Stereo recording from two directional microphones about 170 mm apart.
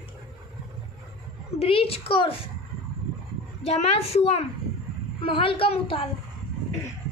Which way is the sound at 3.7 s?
35° left (ahead or behind).